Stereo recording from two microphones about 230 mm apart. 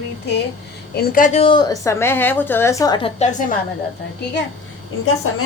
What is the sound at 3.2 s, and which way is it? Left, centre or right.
Speech, left.